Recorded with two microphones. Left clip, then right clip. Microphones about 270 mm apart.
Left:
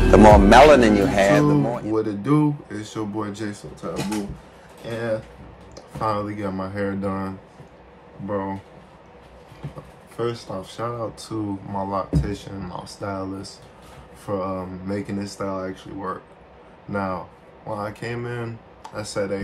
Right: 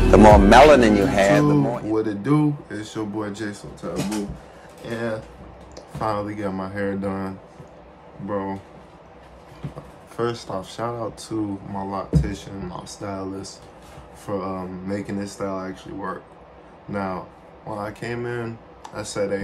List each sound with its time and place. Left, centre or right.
0.0 s speech: centre
5.8 s speech: centre
10.1 s speech: centre